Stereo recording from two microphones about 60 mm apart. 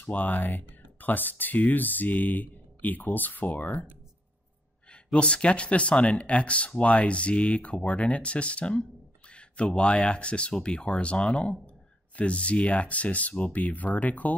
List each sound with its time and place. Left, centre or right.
0.0 s speech: left
5.1 s speech: centre